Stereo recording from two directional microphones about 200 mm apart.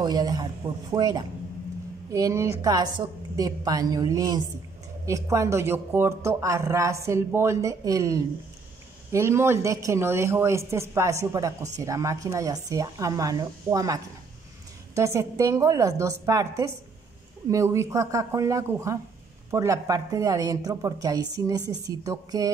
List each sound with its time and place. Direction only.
0.0 s a man's voice: 20° right (ahead or behind)